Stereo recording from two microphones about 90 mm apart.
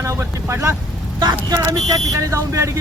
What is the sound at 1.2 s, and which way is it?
Speech, 50° right (ahead or behind).